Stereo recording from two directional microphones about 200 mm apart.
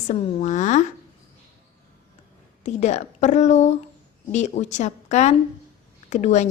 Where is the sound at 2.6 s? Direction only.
35° left (ahead or behind).